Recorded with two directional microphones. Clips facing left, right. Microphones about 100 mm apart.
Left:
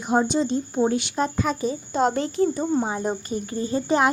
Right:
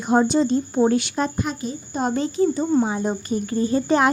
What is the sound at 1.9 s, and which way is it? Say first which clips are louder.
Speech: left 1 dB; 80° left.